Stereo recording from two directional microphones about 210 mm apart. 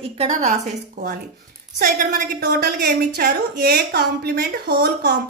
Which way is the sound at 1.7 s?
50° right (ahead or behind).